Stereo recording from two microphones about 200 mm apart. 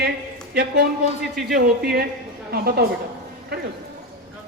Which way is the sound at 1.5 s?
50° right (ahead or behind).